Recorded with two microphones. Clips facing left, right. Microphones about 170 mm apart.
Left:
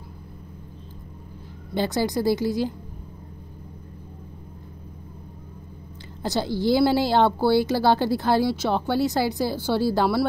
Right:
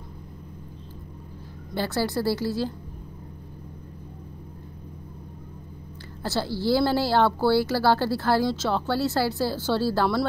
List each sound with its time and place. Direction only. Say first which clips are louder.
1.7 s a woman's voice: left 3 dB; 20° left (ahead or behind)
6.2 s a woman's voice: left 2 dB; 15° left (ahead or behind)